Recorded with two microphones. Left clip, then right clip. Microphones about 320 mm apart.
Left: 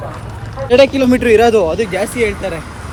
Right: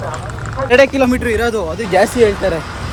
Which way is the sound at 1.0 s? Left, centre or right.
Centre.